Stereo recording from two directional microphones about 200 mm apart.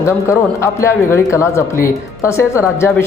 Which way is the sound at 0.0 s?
15° left (ahead or behind).